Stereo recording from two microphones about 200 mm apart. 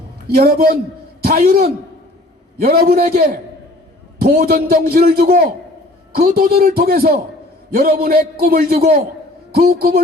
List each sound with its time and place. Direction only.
0.3 s a man's voice: 50° right (ahead or behind)